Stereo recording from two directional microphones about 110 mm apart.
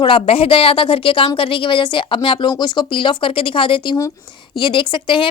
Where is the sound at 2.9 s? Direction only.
50° left (ahead or behind).